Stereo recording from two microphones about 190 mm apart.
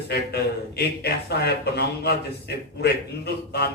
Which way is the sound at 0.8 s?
55° left (ahead or behind).